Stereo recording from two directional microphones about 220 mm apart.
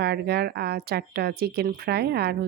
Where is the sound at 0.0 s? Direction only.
45° right (ahead or behind).